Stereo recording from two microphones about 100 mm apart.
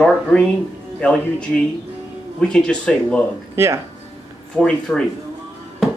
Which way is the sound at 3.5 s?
25° right (ahead or behind).